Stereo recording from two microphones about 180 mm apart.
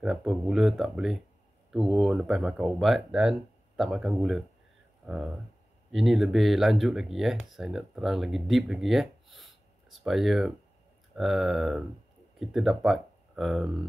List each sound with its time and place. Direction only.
0.0 s speech: centre (ahead or behind)